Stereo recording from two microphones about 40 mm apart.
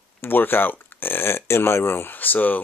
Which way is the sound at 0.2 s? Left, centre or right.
Left.